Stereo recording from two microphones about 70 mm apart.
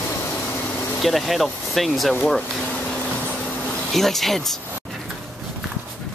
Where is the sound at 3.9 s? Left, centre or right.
Centre.